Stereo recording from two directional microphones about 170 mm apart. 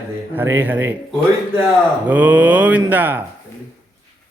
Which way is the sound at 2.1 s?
10° right (ahead or behind).